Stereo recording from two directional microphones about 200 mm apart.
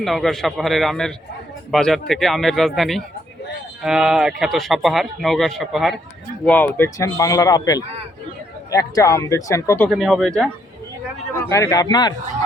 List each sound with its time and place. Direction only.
0.0 s a man's voice: centre (ahead or behind)
9.9 s speech: centre (ahead or behind)
11.3 s a man's voice: 15° left (ahead or behind)